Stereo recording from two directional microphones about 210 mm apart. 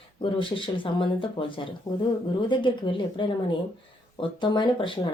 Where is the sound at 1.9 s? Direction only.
15° left (ahead or behind).